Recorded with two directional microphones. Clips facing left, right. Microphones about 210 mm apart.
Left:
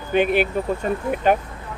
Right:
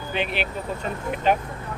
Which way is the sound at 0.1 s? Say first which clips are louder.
Left 9 dB; 50° left (ahead or behind).